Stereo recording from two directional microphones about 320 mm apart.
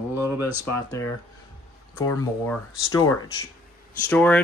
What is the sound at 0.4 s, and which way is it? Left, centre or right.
Speech, left.